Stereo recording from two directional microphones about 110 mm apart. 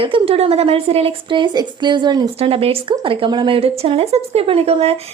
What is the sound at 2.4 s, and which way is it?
Speech, 60° right (ahead or behind).